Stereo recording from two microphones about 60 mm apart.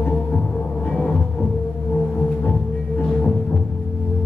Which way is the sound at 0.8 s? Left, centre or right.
Centre.